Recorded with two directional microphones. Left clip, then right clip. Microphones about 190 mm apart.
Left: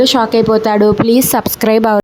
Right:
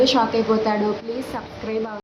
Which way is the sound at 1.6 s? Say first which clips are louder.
Left 16 dB; 65° left (ahead or behind).